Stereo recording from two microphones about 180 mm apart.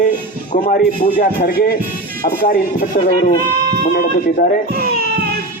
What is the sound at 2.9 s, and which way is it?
Speech, 45° left (ahead or behind).